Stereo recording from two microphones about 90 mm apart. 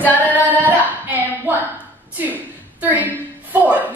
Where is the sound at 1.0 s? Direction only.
20° right (ahead or behind).